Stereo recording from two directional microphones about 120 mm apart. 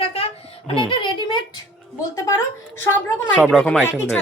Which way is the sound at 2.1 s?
25° left (ahead or behind).